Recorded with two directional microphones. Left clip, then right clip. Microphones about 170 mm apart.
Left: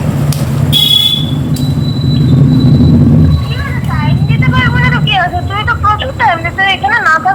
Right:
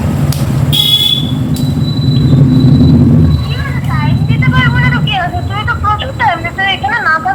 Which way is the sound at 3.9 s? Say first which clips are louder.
Even; 10° left (ahead or behind).